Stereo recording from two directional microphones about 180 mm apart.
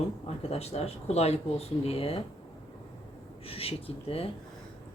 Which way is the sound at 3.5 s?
30° left (ahead or behind).